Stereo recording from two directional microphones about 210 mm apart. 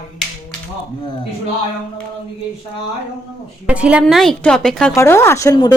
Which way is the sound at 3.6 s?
5° right (ahead or behind).